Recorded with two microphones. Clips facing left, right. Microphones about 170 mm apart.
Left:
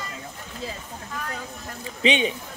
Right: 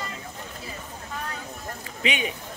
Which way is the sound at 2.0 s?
25° left (ahead or behind).